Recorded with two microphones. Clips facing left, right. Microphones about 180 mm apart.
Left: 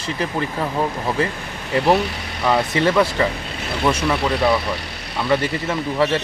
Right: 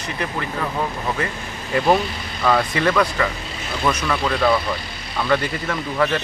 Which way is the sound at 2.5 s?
20° left (ahead or behind).